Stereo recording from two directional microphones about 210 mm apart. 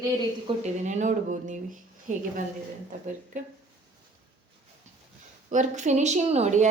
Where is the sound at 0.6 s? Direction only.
35° right (ahead or behind).